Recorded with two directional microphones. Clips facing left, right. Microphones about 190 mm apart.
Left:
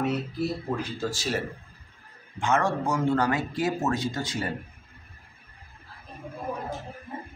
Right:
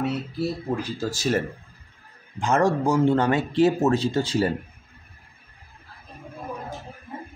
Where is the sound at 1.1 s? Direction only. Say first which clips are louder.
Right 9 dB; 45° right (ahead or behind).